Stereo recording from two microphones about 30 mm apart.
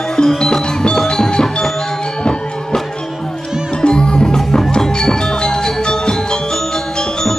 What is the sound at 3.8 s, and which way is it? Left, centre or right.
Music, left.